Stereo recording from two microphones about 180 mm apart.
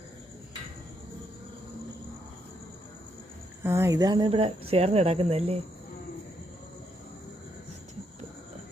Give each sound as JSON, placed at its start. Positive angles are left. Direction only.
{"t": 3.6, "sound": "speech", "side_deg": -15}